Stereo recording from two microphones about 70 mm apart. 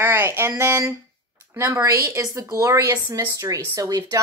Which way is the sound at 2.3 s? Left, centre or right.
Right.